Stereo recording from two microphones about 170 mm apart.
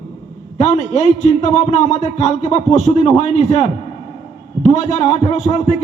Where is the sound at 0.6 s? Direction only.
45° left (ahead or behind).